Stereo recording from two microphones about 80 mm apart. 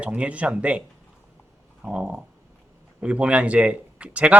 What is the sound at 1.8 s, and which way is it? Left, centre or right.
Speech, centre.